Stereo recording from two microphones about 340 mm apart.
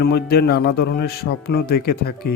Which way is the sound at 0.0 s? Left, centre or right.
Left.